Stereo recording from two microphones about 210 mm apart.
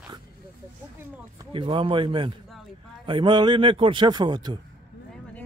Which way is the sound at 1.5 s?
25° right (ahead or behind).